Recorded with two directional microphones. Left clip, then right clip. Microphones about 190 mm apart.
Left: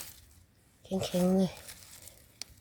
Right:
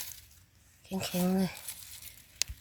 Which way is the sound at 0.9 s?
55° left (ahead or behind).